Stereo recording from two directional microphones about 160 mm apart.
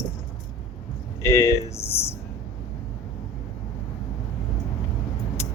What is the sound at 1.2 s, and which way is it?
Speech, 15° left (ahead or behind).